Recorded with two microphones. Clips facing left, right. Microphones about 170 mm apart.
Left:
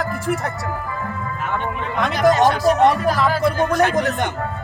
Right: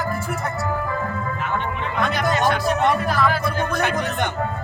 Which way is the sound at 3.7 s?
90° left.